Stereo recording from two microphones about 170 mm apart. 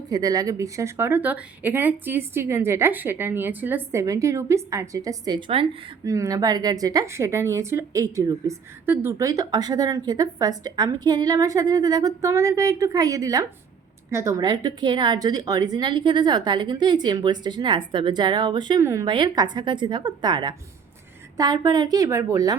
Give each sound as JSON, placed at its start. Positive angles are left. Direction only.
{"t": 0.1, "sound": "speech", "side_deg": -20}
{"t": 6.1, "sound": "a woman's voice", "side_deg": -20}